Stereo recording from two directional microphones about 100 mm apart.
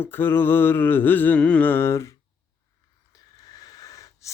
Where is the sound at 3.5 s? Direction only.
35° left (ahead or behind).